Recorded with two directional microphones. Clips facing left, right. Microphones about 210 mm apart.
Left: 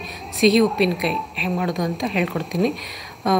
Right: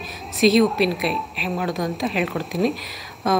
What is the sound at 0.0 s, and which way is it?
A woman's voice, centre (ahead or behind).